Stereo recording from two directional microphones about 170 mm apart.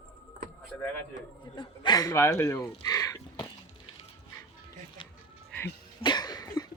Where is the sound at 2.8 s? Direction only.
20° left (ahead or behind).